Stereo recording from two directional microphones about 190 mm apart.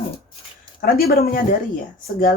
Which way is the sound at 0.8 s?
55° left (ahead or behind).